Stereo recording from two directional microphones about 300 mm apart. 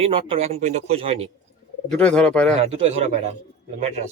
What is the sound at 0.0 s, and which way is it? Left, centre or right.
A man's voice, centre.